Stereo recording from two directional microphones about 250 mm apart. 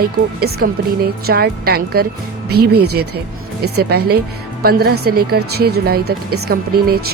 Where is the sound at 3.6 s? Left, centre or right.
Right.